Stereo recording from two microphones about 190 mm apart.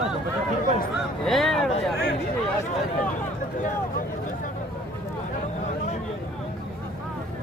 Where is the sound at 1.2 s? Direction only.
Centre (ahead or behind).